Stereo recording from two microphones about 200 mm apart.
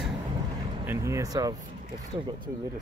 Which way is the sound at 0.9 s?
15° right (ahead or behind).